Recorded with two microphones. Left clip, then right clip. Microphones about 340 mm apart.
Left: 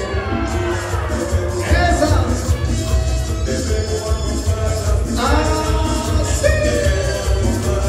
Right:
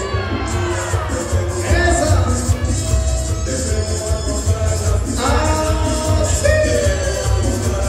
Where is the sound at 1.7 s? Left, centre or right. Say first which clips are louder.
Even; centre.